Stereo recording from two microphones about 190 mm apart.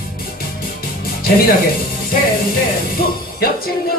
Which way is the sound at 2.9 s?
50° left (ahead or behind).